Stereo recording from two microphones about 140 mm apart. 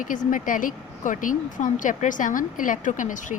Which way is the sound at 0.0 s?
70° left (ahead or behind).